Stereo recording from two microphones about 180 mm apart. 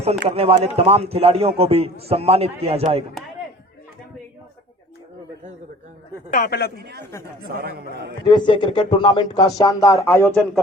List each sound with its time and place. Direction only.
0.3 s a man's voice: 35° right (ahead or behind)
6.3 s speech: 55° left (ahead or behind)
7.0 s speech: 15° left (ahead or behind)
7.4 s speech: 60° right (ahead or behind)
8.3 s speech: 25° left (ahead or behind)